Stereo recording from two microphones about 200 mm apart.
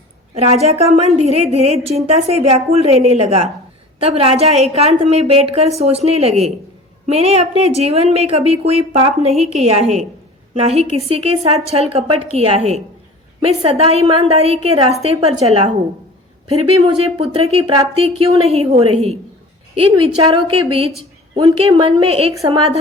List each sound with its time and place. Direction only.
0.3 s a woman's voice: 30° right (ahead or behind)
17.0 s a woman's voice: 30° right (ahead or behind)